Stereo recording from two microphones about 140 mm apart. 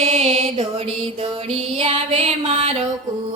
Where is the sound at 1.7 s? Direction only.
45° right (ahead or behind).